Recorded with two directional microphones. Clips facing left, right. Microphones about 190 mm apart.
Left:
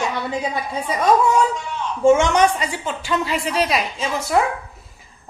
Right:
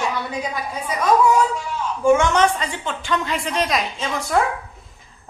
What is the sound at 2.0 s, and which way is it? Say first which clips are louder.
A woman's voice: left 2 dB; 15° left (ahead or behind).